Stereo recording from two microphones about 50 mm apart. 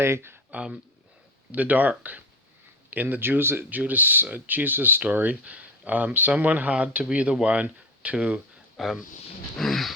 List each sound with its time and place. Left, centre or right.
0.0 s speech: right
0.5 s speech: right
8.8 s speech: centre
9.6 s dog: centre